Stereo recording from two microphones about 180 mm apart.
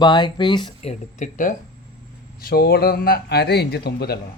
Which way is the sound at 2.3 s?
55° left (ahead or behind).